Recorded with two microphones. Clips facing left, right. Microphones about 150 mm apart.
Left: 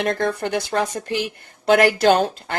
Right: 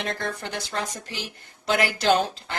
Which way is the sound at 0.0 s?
55° left (ahead or behind).